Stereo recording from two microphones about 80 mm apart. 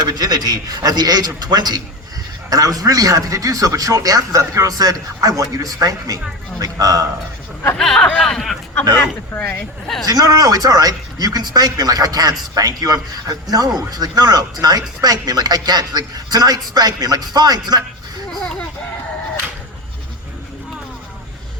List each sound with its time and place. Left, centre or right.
0.1 s speech: right
7.8 s speech: centre
9.3 s speech: left
10.1 s speech: right
18.3 s a sound: centre